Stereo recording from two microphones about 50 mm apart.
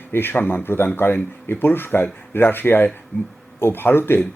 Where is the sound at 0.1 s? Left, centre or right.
Left.